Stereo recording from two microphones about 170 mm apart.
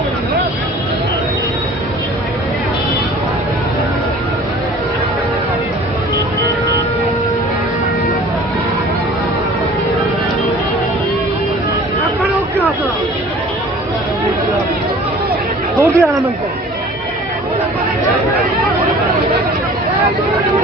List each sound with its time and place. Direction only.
15.7 s chatter: 20° right (ahead or behind)